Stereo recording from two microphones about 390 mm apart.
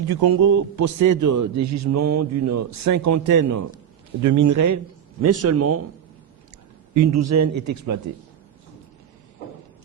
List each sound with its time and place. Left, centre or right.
0.1 s a man's voice: right
6.9 s a man's voice: right